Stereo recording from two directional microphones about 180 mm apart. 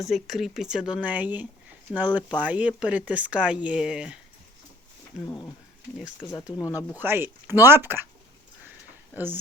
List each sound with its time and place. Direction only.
0.0 s speech: centre (ahead or behind)
5.2 s speech: 20° left (ahead or behind)
6.6 s speech: 20° left (ahead or behind)
6.9 s speech: 10° right (ahead or behind)
9.1 s speech: 10° right (ahead or behind)